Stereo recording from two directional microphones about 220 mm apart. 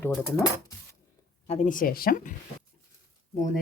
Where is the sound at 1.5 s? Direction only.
35° left (ahead or behind).